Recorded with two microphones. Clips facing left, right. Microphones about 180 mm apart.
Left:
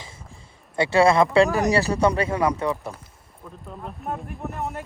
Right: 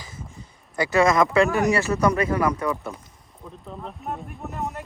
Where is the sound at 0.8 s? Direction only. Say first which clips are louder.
Left 2 dB; 30° left (ahead or behind).